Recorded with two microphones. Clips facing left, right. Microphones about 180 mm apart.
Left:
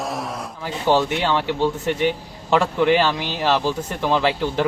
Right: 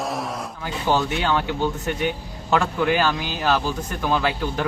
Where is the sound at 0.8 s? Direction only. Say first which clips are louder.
Left 3 dB; 30° left (ahead or behind).